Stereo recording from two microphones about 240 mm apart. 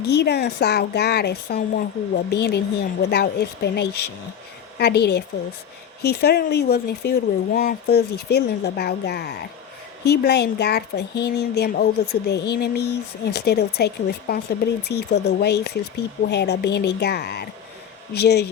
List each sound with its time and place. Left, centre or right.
0.0 s speech: left